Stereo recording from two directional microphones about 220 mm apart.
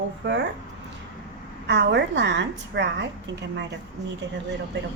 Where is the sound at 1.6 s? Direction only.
55° right (ahead or behind).